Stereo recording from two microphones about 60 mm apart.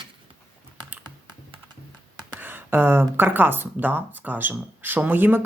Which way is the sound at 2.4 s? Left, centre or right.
Right.